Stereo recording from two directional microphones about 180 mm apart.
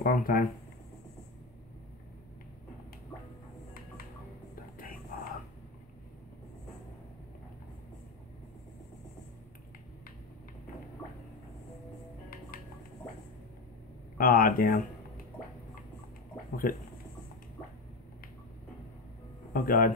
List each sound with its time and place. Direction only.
0.0 s speech: 50° left (ahead or behind)
4.7 s whispering: 50° left (ahead or behind)
14.1 s speech: 55° left (ahead or behind)
19.5 s speech: 50° left (ahead or behind)